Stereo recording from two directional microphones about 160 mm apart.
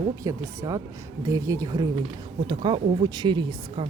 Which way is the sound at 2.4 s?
30° right (ahead or behind).